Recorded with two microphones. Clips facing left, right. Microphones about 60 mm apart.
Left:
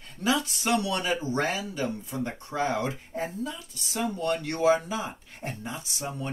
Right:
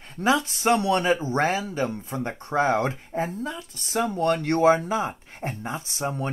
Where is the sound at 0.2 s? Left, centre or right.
Right.